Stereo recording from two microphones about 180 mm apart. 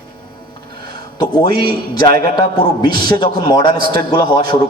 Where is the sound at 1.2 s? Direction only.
25° left (ahead or behind).